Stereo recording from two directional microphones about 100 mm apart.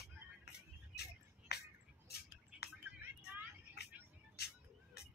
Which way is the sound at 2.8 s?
20° right (ahead or behind).